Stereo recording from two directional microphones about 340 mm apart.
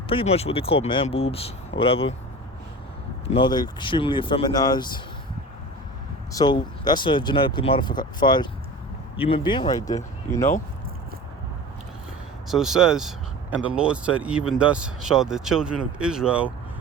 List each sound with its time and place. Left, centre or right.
0.1 s speech: centre
3.2 s speech: centre
6.3 s speech: centre
12.5 s speech: centre